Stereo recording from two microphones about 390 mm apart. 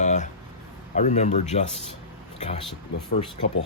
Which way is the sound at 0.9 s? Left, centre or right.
Centre.